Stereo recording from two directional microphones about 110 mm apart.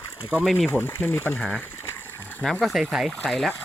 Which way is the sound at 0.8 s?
20° left (ahead or behind).